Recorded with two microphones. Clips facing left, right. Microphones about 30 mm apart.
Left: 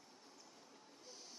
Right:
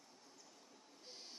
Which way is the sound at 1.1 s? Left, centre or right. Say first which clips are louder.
Right 2 dB; right.